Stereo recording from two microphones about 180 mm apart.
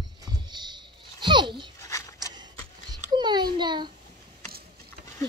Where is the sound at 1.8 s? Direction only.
15° left (ahead or behind).